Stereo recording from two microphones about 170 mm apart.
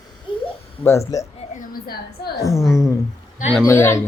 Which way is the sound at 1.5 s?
50° left (ahead or behind).